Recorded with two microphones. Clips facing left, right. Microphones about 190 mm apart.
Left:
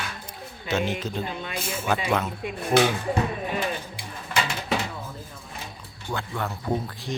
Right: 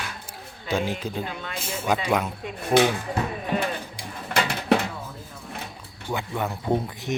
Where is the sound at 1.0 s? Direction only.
10° right (ahead or behind).